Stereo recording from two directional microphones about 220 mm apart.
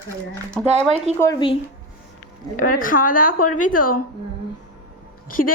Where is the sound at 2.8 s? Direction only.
40° left (ahead or behind).